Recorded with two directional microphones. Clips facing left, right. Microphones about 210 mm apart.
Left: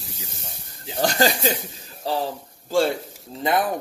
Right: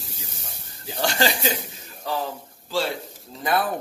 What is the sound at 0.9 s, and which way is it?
Speech, 40° left (ahead or behind).